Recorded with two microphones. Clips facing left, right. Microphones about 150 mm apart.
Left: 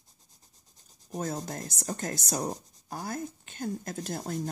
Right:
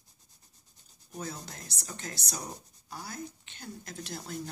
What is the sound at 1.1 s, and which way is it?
Speech, 45° left (ahead or behind).